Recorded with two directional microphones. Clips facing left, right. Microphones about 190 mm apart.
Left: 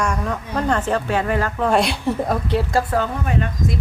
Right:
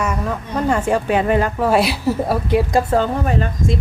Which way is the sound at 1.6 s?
5° right (ahead or behind).